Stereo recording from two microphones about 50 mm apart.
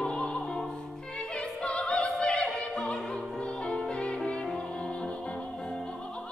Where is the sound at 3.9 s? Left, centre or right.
Left.